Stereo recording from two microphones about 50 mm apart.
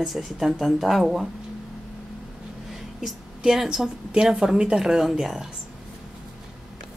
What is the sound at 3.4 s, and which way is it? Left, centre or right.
Speech, centre.